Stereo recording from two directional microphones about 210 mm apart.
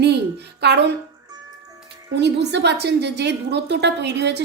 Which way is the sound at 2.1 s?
55° right (ahead or behind).